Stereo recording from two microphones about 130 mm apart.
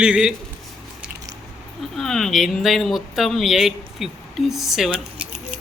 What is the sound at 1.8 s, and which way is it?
Speech, 5° left (ahead or behind).